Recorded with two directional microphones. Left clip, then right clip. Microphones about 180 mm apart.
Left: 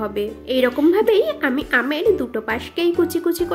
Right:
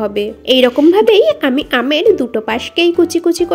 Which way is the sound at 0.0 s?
30° right (ahead or behind).